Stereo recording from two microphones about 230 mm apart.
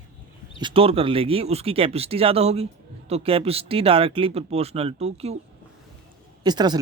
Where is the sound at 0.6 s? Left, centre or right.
Right.